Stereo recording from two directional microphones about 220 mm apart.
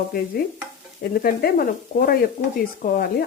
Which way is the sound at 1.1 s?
45° left (ahead or behind).